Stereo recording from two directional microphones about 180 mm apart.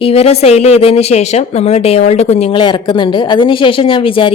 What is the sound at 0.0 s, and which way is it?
A woman's voice, 35° left (ahead or behind).